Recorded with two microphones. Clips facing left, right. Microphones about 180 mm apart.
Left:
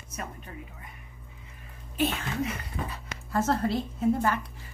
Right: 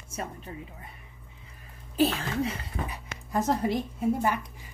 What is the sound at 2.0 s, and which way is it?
Speech, 35° right (ahead or behind).